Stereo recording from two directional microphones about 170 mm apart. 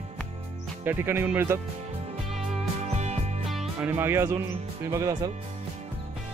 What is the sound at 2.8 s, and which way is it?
Music, 40° right (ahead or behind).